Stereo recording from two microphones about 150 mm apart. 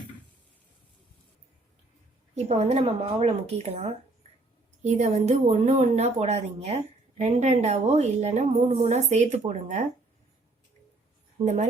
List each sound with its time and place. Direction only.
2.3 s speech: 45° right (ahead or behind)
11.4 s speech: 50° right (ahead or behind)